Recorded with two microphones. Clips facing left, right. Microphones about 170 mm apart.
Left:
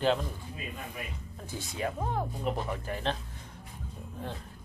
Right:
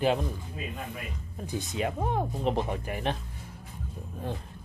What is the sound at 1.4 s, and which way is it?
Speech, 20° right (ahead or behind).